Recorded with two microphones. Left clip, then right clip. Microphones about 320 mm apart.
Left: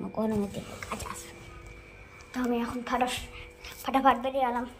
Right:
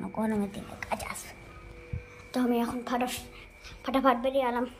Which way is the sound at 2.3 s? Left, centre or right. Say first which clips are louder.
Right 2 dB; centre.